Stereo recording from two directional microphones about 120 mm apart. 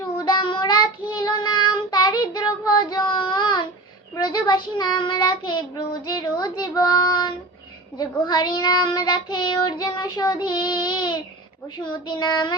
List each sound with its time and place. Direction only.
0.3 s child singing: 40° left (ahead or behind)